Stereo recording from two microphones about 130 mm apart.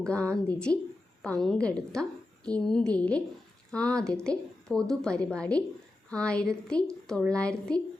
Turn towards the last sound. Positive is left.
turn(degrees=10)  # may be behind; listen again after turning